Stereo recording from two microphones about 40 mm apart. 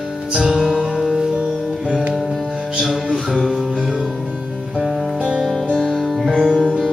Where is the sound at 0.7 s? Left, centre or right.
Right.